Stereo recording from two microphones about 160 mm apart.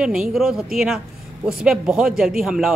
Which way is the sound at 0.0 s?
5° right (ahead or behind).